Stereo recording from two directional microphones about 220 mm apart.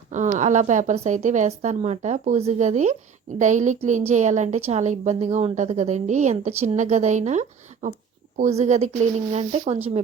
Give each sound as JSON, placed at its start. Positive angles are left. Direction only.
{"t": 0.1, "sound": "a woman's voice", "side_deg": -35}